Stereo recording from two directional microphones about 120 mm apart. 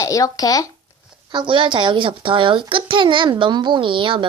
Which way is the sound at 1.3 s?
45° right (ahead or behind).